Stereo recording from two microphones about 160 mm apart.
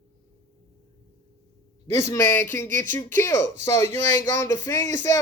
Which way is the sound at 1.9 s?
20° left (ahead or behind).